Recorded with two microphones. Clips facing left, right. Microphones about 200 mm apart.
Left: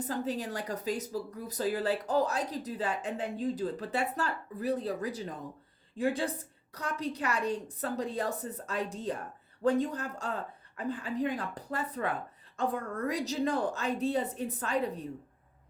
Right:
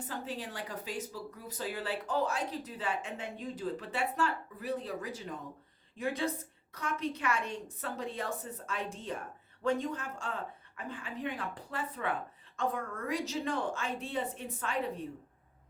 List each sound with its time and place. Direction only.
0.0 s speech: 40° left (ahead or behind)